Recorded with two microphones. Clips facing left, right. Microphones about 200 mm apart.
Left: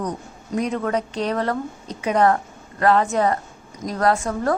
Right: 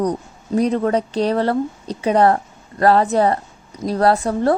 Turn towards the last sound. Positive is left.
turn(degrees=-35)  # may be behind; listen again after turning